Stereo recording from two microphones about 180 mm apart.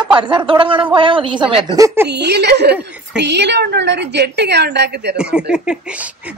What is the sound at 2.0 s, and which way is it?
A woman's voice, 70° right (ahead or behind).